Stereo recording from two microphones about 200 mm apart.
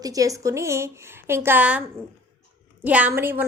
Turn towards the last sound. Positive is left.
turn(degrees=-10)  # may be behind; listen again after turning